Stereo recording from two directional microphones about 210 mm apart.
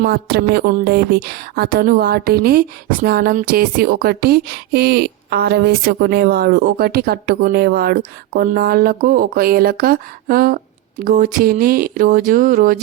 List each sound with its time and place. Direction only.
0.0 s speech: 50° right (ahead or behind)